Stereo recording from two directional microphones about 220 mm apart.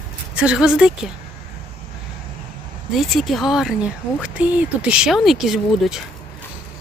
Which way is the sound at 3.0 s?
Centre (ahead or behind).